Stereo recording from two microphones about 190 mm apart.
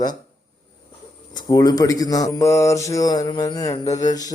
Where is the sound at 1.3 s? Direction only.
20° left (ahead or behind).